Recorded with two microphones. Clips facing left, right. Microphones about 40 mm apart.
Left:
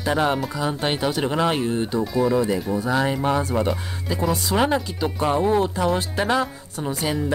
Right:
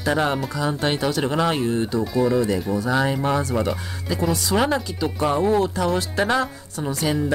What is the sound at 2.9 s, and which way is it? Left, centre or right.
A woman's voice, centre.